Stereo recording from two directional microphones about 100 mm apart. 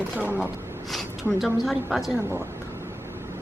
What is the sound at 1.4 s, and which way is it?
Speech, centre (ahead or behind).